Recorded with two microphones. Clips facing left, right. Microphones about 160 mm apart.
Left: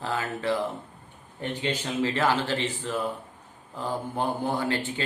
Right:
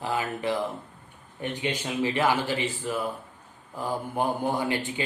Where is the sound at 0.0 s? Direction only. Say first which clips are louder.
Right 1 dB; 15° right (ahead or behind).